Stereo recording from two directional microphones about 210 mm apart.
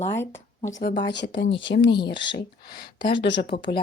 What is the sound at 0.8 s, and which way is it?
Speech, 50° left (ahead or behind).